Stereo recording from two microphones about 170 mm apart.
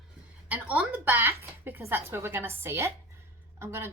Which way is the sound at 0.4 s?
10° right (ahead or behind).